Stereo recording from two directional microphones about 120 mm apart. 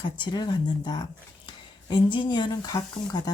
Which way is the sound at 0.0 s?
40° left (ahead or behind).